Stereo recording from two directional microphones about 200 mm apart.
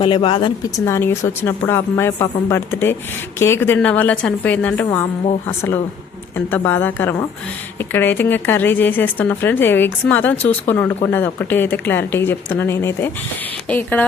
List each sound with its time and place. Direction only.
0.0 s speech: 25° left (ahead or behind)
0.9 s speech: 15° left (ahead or behind)